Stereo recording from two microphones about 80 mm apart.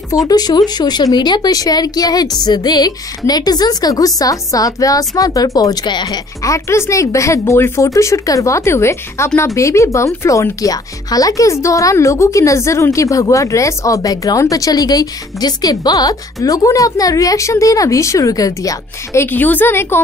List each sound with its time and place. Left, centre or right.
0.3 s speech: left
6.4 s speech: left
19.2 s a woman's voice: left